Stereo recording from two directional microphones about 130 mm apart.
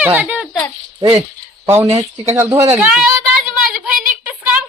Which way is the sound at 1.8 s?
55° right (ahead or behind).